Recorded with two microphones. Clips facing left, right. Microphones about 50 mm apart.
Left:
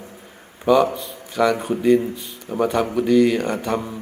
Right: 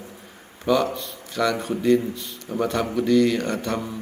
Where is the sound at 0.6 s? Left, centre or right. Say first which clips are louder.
Left 5 dB; centre.